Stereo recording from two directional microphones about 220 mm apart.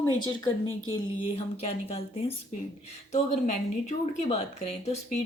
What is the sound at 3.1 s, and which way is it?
Speech, 30° left (ahead or behind).